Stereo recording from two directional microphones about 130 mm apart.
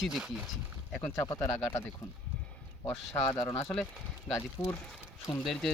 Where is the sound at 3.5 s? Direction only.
5° left (ahead or behind).